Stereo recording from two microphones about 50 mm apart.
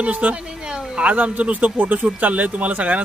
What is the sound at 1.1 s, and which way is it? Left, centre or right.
Speech, right.